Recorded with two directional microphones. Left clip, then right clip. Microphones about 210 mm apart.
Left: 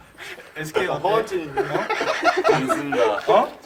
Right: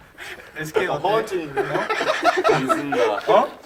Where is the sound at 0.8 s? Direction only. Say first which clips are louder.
Even; 5° right (ahead or behind); by 2.8 s 25° right (ahead or behind).